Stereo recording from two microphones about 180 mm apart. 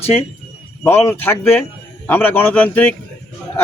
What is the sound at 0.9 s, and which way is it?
A man's voice, 10° left (ahead or behind).